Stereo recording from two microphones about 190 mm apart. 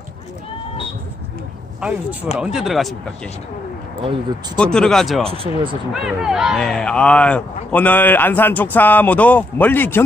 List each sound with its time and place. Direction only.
1.8 s speech: 5° right (ahead or behind)
4.6 s speech: 5° left (ahead or behind)
5.2 s speech: 30° right (ahead or behind)
5.9 s speech: 5° right (ahead or behind)